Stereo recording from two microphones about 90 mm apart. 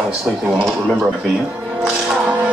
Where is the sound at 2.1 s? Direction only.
15° right (ahead or behind).